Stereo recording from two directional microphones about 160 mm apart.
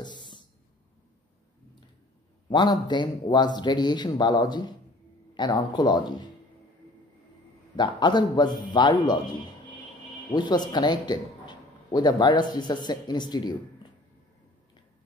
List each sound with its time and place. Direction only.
0.0 s a sound: 30° left (ahead or behind)
2.5 s a man's voice: 25° left (ahead or behind)
7.7 s a man's voice: 25° left (ahead or behind)
10.3 s a man's voice: 25° left (ahead or behind)